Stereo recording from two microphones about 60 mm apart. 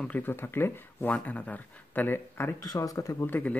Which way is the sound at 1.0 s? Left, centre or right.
Left.